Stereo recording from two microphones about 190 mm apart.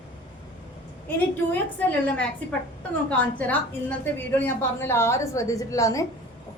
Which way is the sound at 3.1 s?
10° left (ahead or behind).